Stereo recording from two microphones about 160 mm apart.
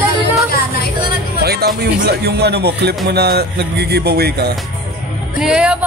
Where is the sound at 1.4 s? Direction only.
85° right.